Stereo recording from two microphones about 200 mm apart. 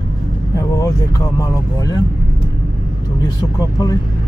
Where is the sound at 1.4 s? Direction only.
20° left (ahead or behind).